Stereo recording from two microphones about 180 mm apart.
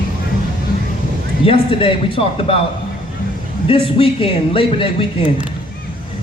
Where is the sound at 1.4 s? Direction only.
30° left (ahead or behind).